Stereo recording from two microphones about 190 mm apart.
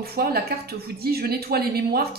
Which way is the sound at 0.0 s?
55° right (ahead or behind).